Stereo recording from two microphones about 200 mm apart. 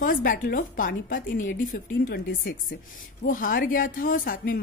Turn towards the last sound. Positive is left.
turn(degrees=45)  # may be behind; listen again after turning